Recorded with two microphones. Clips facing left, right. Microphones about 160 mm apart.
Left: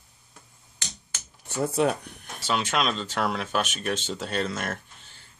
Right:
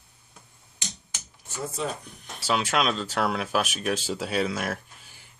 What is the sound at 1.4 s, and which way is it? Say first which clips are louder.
Speech: left 7 dB; 65° left (ahead or behind).